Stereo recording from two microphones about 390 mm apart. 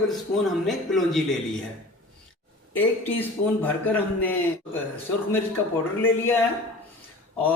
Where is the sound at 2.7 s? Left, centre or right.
Centre.